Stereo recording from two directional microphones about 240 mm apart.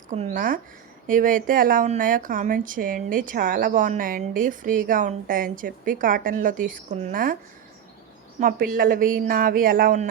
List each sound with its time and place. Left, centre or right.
0.1 s a woman's voice: right
8.4 s a woman's voice: right